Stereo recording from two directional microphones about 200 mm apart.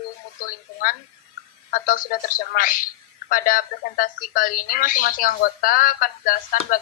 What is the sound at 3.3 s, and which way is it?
Speech, 45° left (ahead or behind).